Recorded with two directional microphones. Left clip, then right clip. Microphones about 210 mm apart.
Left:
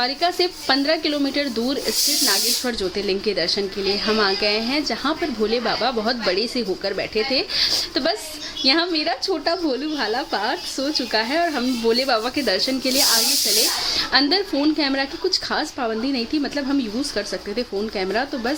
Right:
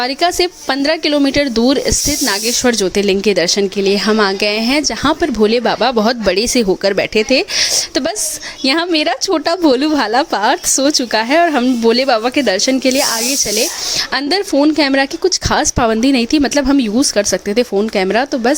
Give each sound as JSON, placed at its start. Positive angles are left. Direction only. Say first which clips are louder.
{"t": 0.0, "sound": "speech", "louder": "right 6 dB", "side_deg": -45}
{"t": 14.1, "sound": "speech", "louder": "right 3 dB", "side_deg": -40}